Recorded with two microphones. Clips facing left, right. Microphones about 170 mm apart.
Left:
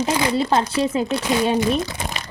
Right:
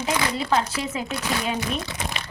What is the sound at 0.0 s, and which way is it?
Speech, 30° left (ahead or behind).